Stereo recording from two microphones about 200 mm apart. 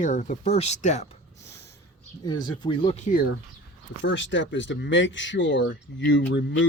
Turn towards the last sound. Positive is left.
turn(degrees=60)  # may be behind; listen again after turning